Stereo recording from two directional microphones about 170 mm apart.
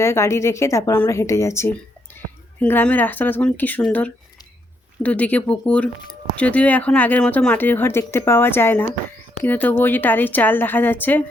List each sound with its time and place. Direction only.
0.0 s speech: 15° left (ahead or behind)